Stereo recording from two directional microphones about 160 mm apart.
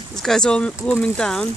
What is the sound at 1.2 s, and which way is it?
Speech, 5° left (ahead or behind).